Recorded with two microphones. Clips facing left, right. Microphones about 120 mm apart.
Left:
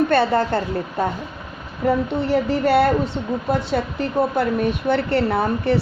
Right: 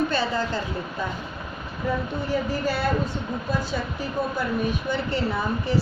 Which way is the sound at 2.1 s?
70° left (ahead or behind).